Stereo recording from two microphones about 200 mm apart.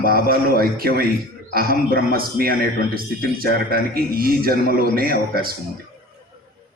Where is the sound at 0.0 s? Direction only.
45° right (ahead or behind).